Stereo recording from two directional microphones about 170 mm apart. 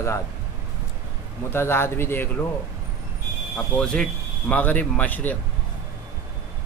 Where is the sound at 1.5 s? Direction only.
15° left (ahead or behind).